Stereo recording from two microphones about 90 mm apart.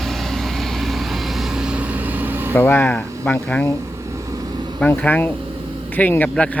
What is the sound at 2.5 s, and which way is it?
Speech, 25° left (ahead or behind).